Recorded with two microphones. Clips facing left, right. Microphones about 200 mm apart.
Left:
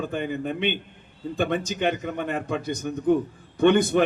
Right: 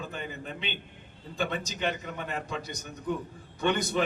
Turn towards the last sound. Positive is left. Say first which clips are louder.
# left 9 dB
turn(degrees=55)  # may be behind; listen again after turning